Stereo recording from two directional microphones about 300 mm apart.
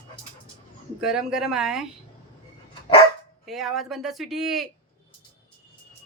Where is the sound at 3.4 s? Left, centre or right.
Centre.